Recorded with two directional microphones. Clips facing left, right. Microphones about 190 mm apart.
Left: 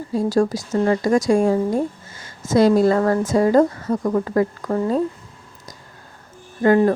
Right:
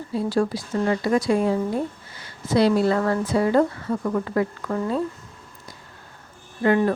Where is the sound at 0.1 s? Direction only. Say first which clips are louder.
Left 4 dB; 40° left (ahead or behind).